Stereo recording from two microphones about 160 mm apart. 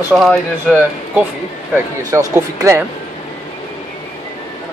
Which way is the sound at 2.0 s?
20° right (ahead or behind).